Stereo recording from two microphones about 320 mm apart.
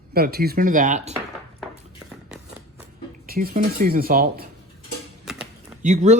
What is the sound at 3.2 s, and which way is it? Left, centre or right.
Speech, right.